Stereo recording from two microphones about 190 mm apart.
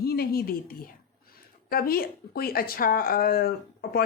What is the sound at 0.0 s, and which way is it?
Speech, 55° left (ahead or behind).